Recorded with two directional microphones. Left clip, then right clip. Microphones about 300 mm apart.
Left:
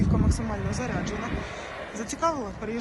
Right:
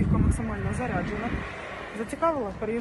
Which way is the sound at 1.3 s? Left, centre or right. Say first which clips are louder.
Even; left.